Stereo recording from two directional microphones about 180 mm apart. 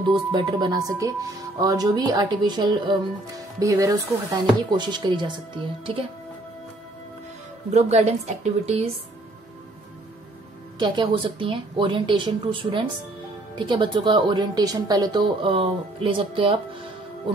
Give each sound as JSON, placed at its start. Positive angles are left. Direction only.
{"t": 0.1, "sound": "speech", "side_deg": -25}
{"t": 7.7, "sound": "a woman's voice", "side_deg": -35}
{"t": 10.8, "sound": "speech", "side_deg": -25}